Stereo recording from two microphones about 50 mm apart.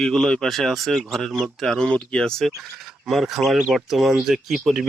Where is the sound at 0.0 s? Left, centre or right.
Centre.